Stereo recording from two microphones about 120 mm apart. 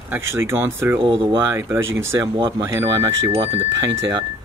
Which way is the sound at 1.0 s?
45° right (ahead or behind).